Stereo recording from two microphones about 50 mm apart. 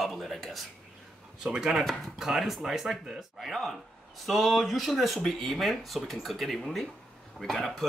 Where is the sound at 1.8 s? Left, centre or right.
Centre.